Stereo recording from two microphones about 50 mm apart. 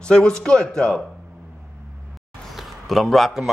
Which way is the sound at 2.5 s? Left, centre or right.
Centre.